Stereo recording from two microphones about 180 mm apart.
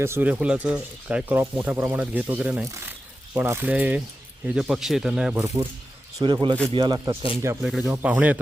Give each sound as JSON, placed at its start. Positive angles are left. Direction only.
{"t": 0.0, "sound": "speech", "side_deg": -10}
{"t": 5.3, "sound": "speech", "side_deg": -15}
{"t": 7.6, "sound": "speech", "side_deg": 0}